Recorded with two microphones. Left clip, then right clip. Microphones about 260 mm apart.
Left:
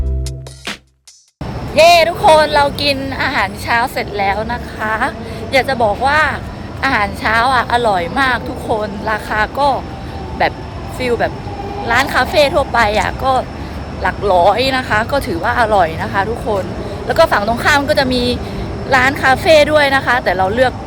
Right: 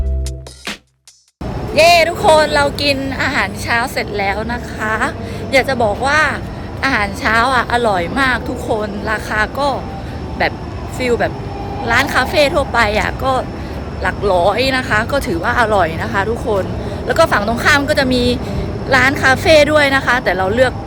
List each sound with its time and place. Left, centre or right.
1.7 s a woman's voice: centre